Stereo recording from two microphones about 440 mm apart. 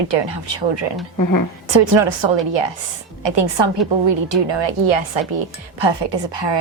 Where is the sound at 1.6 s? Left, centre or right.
Right.